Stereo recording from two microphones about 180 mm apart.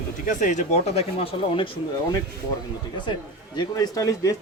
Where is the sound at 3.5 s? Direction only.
20° left (ahead or behind).